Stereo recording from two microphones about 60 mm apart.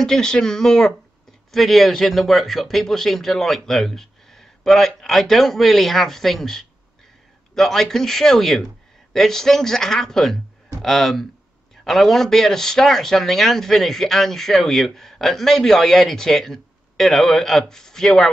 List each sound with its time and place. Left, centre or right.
0.0 s speech: centre